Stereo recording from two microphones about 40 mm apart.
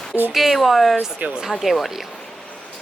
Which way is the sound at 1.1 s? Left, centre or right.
Right.